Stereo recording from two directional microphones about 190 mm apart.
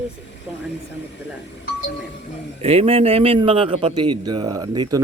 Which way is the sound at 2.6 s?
30° right (ahead or behind).